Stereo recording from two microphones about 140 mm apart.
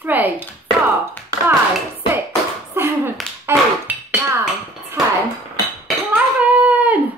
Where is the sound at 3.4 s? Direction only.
15° right (ahead or behind).